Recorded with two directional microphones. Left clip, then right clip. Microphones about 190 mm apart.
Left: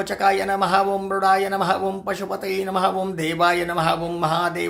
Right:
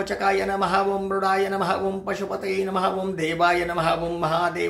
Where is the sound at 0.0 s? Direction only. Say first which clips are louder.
Left 3 dB; 25° left (ahead or behind).